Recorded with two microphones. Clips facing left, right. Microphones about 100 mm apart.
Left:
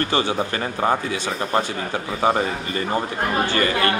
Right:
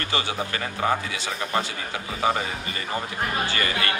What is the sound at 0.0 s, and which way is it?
Speech, 35° left (ahead or behind).